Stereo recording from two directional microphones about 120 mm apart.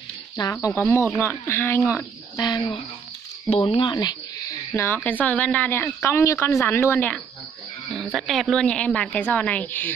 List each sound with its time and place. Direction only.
0.4 s speech: 30° left (ahead or behind)
2.3 s speech: 40° left (ahead or behind)
3.4 s speech: 55° left (ahead or behind)
3.8 s speech: 35° left (ahead or behind); by 7.2 s 15° left (ahead or behind)
7.9 s a woman's voice: centre (ahead or behind); by 9.9 s 15° left (ahead or behind)